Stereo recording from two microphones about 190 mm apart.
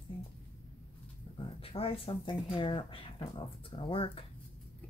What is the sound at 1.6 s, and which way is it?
Speech, 30° left (ahead or behind).